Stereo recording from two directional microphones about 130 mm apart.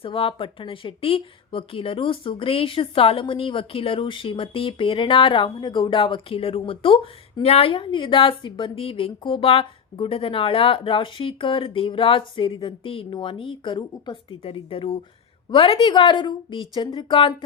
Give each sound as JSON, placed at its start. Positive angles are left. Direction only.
{"t": 0.0, "sound": "a woman's voice", "side_deg": 45}